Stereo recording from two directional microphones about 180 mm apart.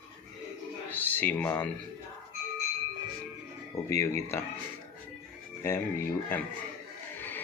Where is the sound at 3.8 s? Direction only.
15° left (ahead or behind).